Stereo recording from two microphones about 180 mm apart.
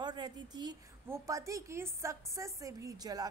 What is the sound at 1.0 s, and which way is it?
Speech, 15° right (ahead or behind).